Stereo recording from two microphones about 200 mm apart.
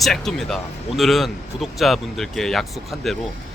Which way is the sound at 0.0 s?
Centre (ahead or behind).